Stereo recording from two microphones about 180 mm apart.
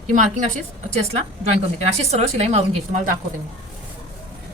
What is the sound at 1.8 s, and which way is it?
A woman's voice, 35° right (ahead or behind).